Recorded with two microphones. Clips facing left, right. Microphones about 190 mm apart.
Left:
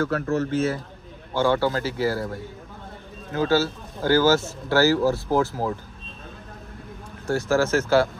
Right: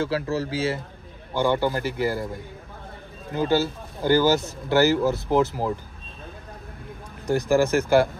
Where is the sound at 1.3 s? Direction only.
15° right (ahead or behind).